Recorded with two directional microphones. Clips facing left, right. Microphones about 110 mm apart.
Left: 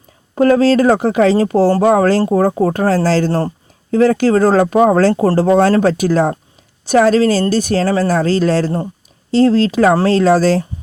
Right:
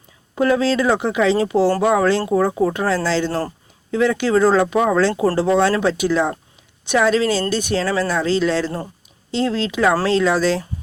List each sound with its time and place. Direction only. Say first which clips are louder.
0.3 s speech: left 6 dB; 45° left (ahead or behind)